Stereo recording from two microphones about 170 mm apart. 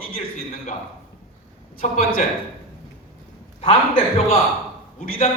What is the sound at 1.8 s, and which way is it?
Speech, 55° left (ahead or behind).